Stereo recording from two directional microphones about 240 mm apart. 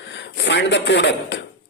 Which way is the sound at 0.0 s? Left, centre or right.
Left.